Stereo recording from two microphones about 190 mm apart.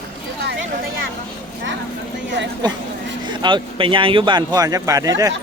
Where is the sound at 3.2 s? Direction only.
25° right (ahead or behind).